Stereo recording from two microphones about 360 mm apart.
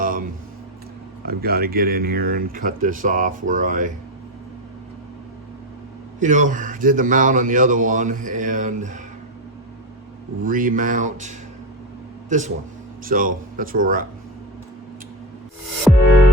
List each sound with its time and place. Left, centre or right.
1.2 s speech: right
6.1 s speech: right
10.4 s speech: right
15.9 s music: centre